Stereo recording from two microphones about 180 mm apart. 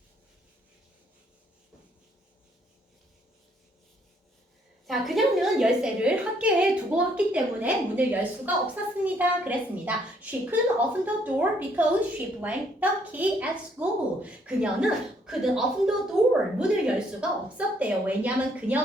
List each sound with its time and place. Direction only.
4.9 s a woman's voice: centre (ahead or behind)